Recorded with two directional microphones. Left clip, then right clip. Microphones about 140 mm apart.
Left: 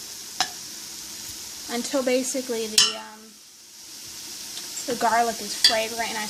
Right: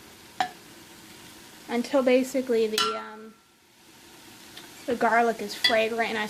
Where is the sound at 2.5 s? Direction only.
15° right (ahead or behind).